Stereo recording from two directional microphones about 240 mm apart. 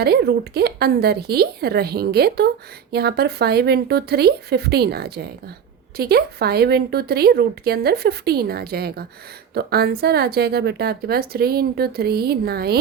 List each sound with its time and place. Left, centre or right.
0.0 s a woman's voice: right